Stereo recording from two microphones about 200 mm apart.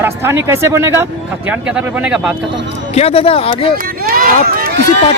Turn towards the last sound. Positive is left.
turn(degrees=-50)  # may be behind; listen again after turning